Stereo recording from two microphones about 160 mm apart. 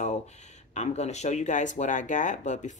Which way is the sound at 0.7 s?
45° left (ahead or behind).